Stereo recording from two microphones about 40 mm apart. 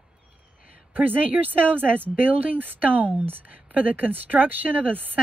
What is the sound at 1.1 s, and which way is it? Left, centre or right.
Speech, right.